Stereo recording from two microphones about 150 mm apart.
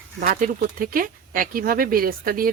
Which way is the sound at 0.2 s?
65° right (ahead or behind).